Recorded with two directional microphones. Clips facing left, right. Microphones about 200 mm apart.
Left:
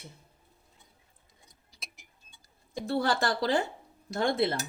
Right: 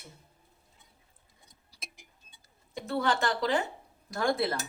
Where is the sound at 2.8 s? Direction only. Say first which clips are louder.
Left 1 dB; 35° left (ahead or behind).